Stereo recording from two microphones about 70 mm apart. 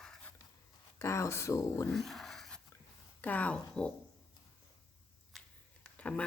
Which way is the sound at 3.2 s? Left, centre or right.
Left.